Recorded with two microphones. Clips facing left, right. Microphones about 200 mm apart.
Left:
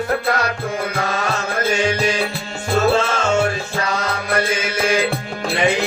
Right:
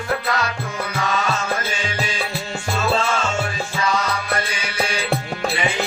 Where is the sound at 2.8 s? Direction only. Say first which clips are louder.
Left 3 dB; 50° left (ahead or behind).